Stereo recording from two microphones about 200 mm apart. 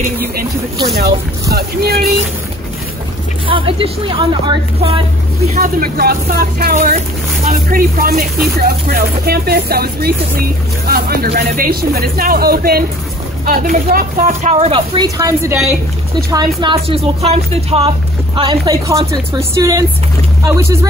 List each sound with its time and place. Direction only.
1.5 s speech: 50° right (ahead or behind)
3.4 s speech: 25° right (ahead or behind)
5.5 s speech: 45° right (ahead or behind); by 15.0 s 30° right (ahead or behind)
15.1 s speech: 15° right (ahead or behind)